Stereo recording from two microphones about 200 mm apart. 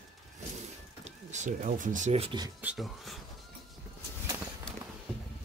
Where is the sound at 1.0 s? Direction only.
35° right (ahead or behind).